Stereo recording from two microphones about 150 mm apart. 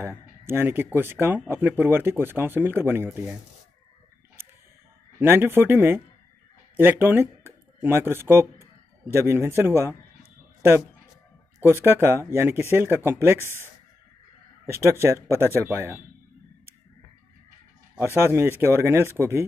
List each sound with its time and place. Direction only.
0.5 s speech: 15° right (ahead or behind)
5.2 s speech: 15° right (ahead or behind)
11.8 s speech: 15° right (ahead or behind)
14.7 s speech: 15° right (ahead or behind)
17.9 s speech: 15° right (ahead or behind)